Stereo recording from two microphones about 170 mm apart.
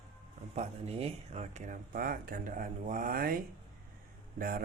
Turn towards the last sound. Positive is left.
turn(degrees=-55)  # may be behind; listen again after turning